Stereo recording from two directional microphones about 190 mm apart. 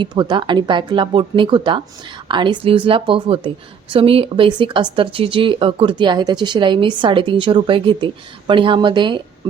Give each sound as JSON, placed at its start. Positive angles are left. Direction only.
{"t": 0.0, "sound": "speech", "side_deg": -25}